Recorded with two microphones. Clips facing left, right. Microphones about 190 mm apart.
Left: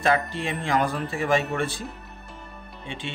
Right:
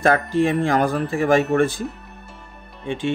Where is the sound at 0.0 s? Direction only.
50° right (ahead or behind).